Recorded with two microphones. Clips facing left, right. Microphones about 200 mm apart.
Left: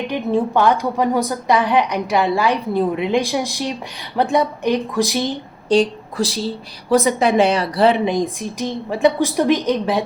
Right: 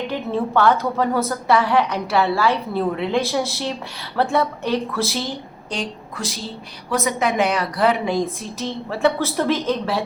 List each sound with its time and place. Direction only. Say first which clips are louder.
0.1 s a woman's voice: left 5 dB; 15° left (ahead or behind)
5.6 s a woman's voice: left 13 dB; 35° left (ahead or behind); by 10.0 s 15° left (ahead or behind)